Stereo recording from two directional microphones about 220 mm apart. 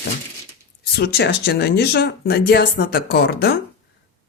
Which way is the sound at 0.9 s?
45° left (ahead or behind).